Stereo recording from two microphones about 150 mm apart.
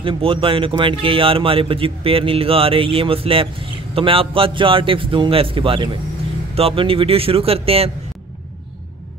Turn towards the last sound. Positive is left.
turn(degrees=-40)  # may be behind; listen again after turning